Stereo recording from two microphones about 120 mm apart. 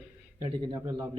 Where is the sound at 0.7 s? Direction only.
35° right (ahead or behind).